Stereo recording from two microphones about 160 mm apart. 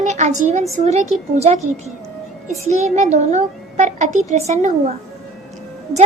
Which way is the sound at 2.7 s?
45° right (ahead or behind).